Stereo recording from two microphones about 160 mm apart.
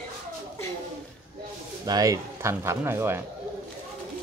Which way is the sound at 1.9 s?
20° right (ahead or behind).